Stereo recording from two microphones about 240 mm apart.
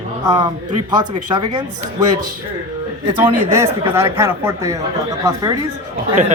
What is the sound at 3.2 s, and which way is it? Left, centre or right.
Speech, centre.